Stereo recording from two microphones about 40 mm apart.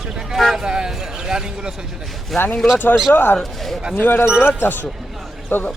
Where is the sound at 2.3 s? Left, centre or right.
Centre.